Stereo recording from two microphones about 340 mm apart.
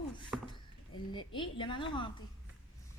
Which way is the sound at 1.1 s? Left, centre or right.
Centre.